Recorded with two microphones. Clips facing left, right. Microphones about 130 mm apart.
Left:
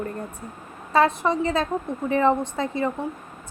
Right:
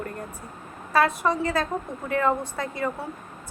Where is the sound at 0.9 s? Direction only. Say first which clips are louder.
Left 2 dB; 25° left (ahead or behind).